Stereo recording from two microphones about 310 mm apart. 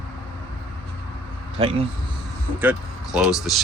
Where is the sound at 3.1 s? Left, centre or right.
Centre.